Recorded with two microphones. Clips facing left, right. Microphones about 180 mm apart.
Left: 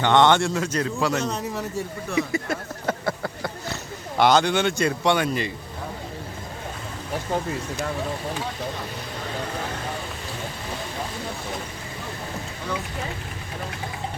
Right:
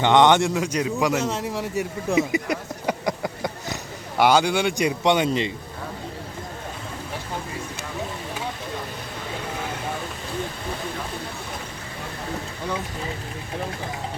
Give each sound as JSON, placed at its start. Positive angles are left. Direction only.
{"t": 0.0, "sound": "a man's voice", "side_deg": -15}
{"t": 2.0, "sound": "a sound", "side_deg": -20}
{"t": 4.2, "sound": "speech", "side_deg": -10}